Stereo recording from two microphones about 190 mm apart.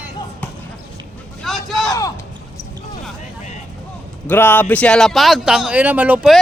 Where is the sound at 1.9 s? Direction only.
15° left (ahead or behind).